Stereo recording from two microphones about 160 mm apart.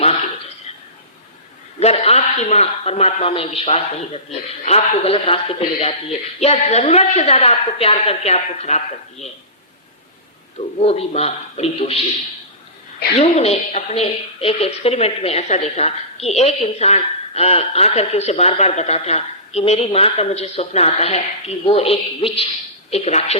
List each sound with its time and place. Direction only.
1.8 s a woman's voice: 40° left (ahead or behind)
10.8 s a woman's voice: 40° left (ahead or behind)
13.1 s a woman's voice: 40° left (ahead or behind)